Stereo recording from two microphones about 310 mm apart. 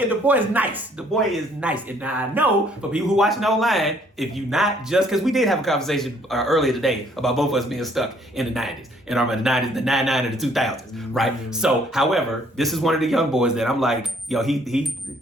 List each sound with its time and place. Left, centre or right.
0.1 s a man's voice: centre